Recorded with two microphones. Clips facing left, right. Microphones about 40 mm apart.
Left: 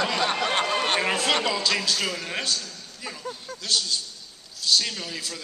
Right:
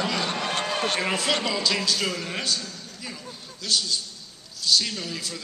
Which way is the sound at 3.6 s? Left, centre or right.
Centre.